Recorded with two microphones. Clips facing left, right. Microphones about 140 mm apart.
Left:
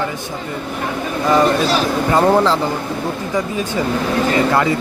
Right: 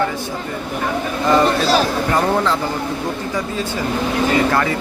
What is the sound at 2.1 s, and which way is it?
Speech, 30° left (ahead or behind).